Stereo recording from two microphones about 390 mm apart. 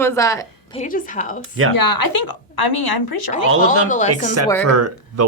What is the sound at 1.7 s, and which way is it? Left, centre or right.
A woman's voice, left.